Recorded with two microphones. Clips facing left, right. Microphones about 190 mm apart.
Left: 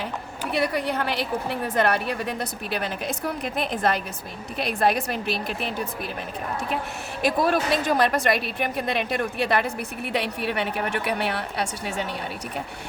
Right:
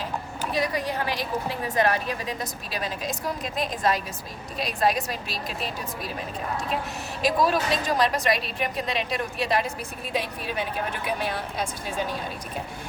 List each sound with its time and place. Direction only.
0.5 s a woman's voice: 65° left (ahead or behind)
7.2 s a woman's voice: 55° left (ahead or behind); by 12.0 s 70° left (ahead or behind)